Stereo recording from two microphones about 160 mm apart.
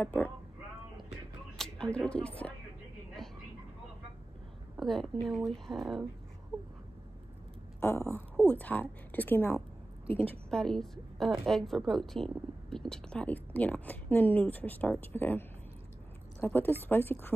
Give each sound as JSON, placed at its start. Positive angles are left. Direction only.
{"t": 0.0, "sound": "a woman's voice", "side_deg": 10}
{"t": 1.6, "sound": "speech", "side_deg": 5}
{"t": 3.2, "sound": "vehicle", "side_deg": 0}
{"t": 4.7, "sound": "a woman's voice", "side_deg": 0}
{"t": 8.5, "sound": "a woman's voice", "side_deg": 10}
{"t": 10.0, "sound": "a woman's voice", "side_deg": -35}
{"t": 10.3, "sound": "a woman's voice", "side_deg": 5}